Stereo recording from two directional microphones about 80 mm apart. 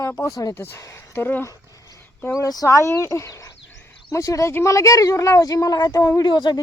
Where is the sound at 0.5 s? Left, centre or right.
Left.